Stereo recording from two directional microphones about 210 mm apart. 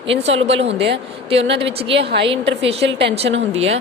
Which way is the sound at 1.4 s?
60° right (ahead or behind).